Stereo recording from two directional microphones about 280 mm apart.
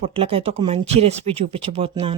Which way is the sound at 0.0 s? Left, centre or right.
Right.